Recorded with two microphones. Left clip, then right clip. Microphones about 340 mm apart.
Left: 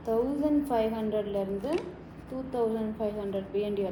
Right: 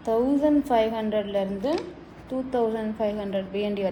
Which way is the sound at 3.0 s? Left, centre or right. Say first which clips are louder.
Right 7 dB; right.